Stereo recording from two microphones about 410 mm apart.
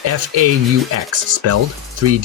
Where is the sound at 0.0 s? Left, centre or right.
Right.